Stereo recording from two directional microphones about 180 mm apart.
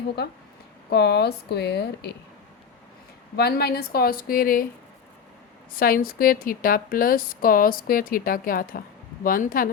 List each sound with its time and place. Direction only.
0.9 s speech: 65° left (ahead or behind)
3.3 s speech: 60° left (ahead or behind)
5.7 s a woman's voice: 55° left (ahead or behind)